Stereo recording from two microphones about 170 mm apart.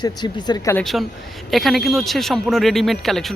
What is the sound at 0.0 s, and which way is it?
Speech, 25° left (ahead or behind).